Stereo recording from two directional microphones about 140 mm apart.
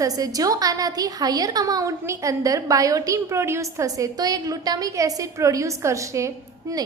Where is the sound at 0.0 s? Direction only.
25° right (ahead or behind).